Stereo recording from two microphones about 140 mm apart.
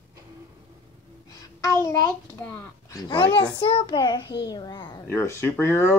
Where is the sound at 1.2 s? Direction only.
25° left (ahead or behind).